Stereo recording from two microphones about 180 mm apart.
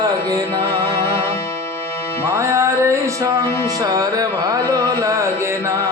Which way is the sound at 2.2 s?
15° right (ahead or behind).